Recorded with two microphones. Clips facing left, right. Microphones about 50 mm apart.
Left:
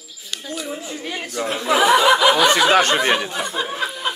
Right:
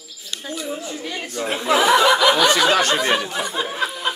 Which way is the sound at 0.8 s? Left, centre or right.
Centre.